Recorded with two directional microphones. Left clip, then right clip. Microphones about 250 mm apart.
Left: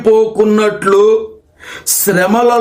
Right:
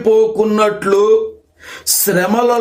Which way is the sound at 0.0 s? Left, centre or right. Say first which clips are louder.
Left 2 dB; centre.